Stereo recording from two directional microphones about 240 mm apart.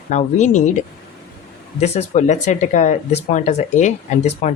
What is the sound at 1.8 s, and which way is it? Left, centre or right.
Speech, left.